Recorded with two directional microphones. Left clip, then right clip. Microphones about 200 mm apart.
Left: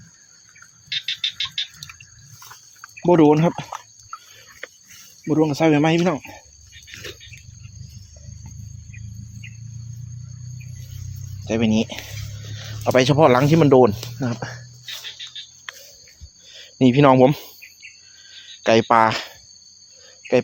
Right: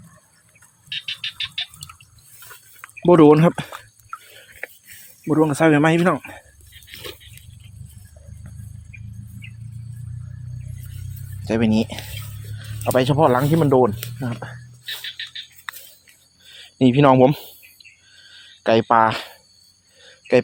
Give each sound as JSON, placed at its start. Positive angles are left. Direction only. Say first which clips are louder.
{"t": 3.0, "sound": "speech", "louder": "right 3 dB", "side_deg": -10}
{"t": 5.3, "sound": "speech", "louder": "right 1 dB", "side_deg": 0}
{"t": 11.4, "sound": "speech", "louder": "right 1 dB", "side_deg": -5}
{"t": 12.8, "sound": "speech", "louder": "left 2 dB", "side_deg": 10}
{"t": 13.4, "sound": "speech", "louder": "left 3 dB", "side_deg": 25}
{"t": 16.5, "sound": "speech", "louder": "even", "side_deg": 0}
{"t": 18.2, "sound": "a sound", "louder": "left 2 dB", "side_deg": 0}